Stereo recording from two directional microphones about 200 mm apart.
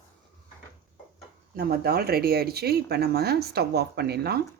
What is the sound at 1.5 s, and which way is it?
Speech, 50° right (ahead or behind).